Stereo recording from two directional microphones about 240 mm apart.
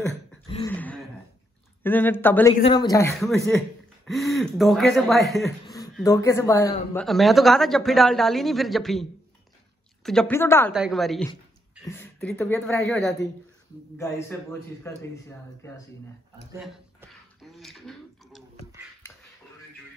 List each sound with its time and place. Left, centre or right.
0.7 s a sound: centre
1.8 s a man's voice: centre
2.6 s a man's voice: centre
3.4 s speech: centre
6.0 s a man's voice: centre
7.1 s speech: centre
10.0 s a man's voice: centre
10.7 s a man's voice: centre
16.5 s speech: centre